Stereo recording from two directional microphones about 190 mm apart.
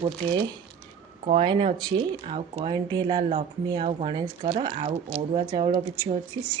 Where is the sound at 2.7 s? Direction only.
20° right (ahead or behind).